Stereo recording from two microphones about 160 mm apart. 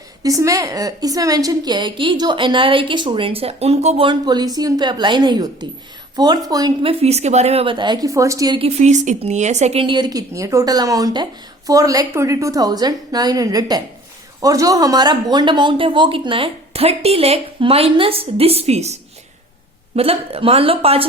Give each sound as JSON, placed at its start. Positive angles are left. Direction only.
{"t": 0.2, "sound": "a woman's voice", "side_deg": -20}
{"t": 6.8, "sound": "speech", "side_deg": -40}
{"t": 8.5, "sound": "a woman's voice", "side_deg": -40}
{"t": 20.0, "sound": "speech", "side_deg": -35}